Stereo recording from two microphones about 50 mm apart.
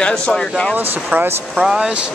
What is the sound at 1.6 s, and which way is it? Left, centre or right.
Speech, centre.